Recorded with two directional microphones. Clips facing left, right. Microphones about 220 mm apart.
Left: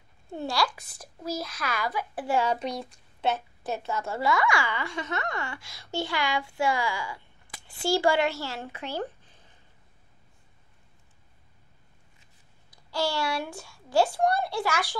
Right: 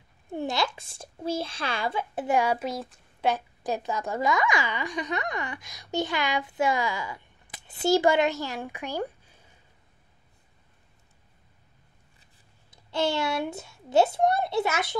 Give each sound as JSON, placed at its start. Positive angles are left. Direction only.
{"t": 0.3, "sound": "speech", "side_deg": -20}
{"t": 3.3, "sound": "a woman's voice", "side_deg": -15}
{"t": 12.7, "sound": "speech", "side_deg": -20}